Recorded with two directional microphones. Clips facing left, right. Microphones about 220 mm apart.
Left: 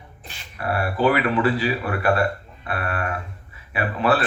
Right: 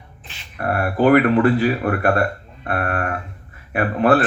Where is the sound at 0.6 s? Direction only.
50° right (ahead or behind).